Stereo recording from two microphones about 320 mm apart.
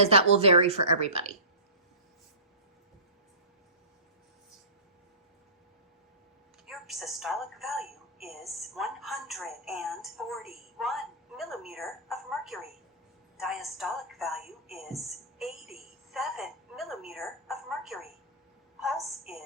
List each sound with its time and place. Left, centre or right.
0.0 s a woman's voice: centre
6.7 s a woman's voice: centre
13.3 s music: centre
18.8 s a woman's voice: centre